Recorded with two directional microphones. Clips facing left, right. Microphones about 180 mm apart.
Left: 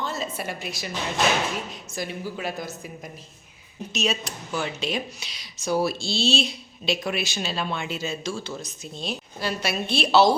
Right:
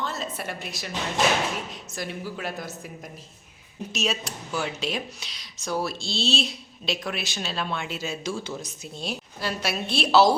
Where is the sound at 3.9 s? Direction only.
5° right (ahead or behind).